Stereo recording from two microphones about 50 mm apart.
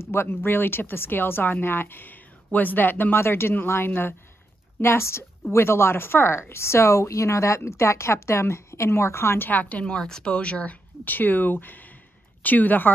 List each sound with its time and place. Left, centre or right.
0.0 s speech: left
4.8 s speech: left
9.5 s speech: left
9.8 s speech: centre
11.1 s speech: left